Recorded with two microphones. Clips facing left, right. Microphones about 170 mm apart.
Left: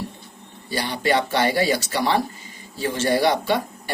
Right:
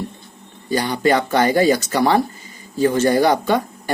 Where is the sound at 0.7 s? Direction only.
45° right (ahead or behind).